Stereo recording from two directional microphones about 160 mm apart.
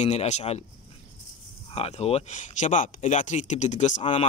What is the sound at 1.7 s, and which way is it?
Speech, 40° left (ahead or behind).